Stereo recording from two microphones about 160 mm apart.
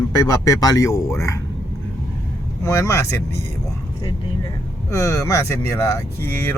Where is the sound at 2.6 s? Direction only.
15° left (ahead or behind).